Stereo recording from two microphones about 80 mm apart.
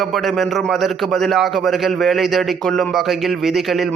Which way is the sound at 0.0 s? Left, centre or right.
Centre.